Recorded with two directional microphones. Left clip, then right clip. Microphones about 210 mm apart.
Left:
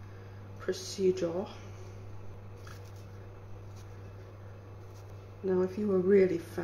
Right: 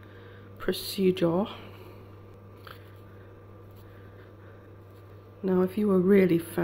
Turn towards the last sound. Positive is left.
turn(degrees=-40)  # may be behind; listen again after turning